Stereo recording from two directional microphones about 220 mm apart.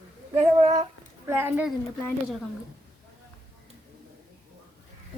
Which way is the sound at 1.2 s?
10° right (ahead or behind).